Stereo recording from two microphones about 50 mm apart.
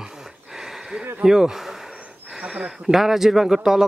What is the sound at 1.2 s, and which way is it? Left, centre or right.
A man's voice, centre.